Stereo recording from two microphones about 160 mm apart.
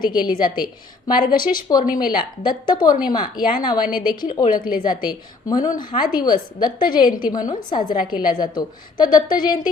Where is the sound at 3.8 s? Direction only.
65° left (ahead or behind).